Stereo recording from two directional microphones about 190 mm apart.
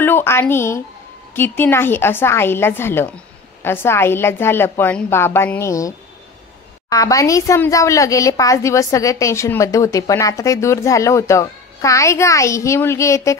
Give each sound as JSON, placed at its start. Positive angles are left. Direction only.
{"t": 0.0, "sound": "a woman's voice", "side_deg": 10}